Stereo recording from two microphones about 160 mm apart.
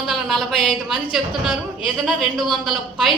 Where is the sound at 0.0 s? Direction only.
Centre (ahead or behind).